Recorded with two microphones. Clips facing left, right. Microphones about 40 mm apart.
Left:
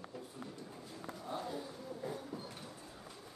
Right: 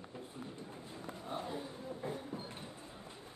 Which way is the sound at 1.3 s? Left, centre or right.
Right.